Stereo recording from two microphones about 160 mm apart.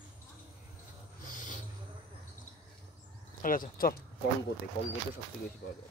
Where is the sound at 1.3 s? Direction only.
55° left (ahead or behind).